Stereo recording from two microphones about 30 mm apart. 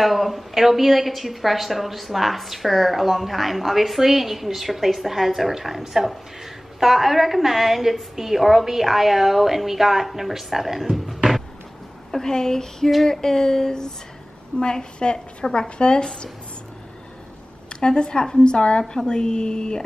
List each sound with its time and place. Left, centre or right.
0.0 s a woman's voice: centre
12.2 s a woman's voice: centre
12.9 s a sound: centre
14.6 s a woman's voice: left
17.6 s a woman's voice: left